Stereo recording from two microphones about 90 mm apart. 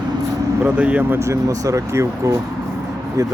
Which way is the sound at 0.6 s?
15° right (ahead or behind).